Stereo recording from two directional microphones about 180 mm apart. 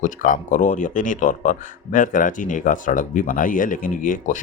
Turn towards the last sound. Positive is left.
turn(degrees=45)  # may be behind; listen again after turning